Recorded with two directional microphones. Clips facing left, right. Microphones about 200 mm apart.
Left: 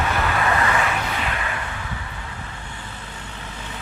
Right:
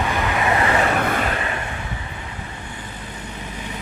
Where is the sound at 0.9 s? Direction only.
50° right (ahead or behind); by 1.6 s 35° right (ahead or behind).